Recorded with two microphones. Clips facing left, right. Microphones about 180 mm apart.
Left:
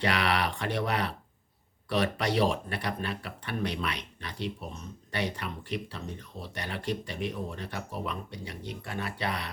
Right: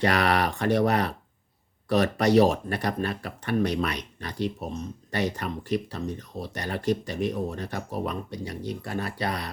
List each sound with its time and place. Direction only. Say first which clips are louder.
0.0 s speech: right 5 dB; 45° right (ahead or behind)